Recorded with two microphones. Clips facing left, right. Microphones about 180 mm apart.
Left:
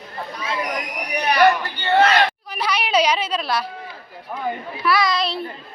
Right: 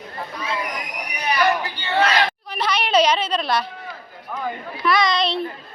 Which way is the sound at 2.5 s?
10° left (ahead or behind).